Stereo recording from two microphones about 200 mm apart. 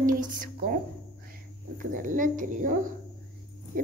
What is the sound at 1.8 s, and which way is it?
A child's voice, 40° right (ahead or behind).